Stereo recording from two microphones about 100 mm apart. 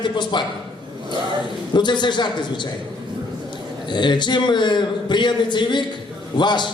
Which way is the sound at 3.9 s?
50° left (ahead or behind).